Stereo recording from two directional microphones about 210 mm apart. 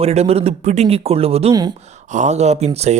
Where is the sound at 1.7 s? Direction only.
30° right (ahead or behind).